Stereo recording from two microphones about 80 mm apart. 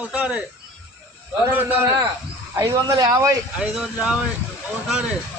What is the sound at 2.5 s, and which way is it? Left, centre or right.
Speech, right.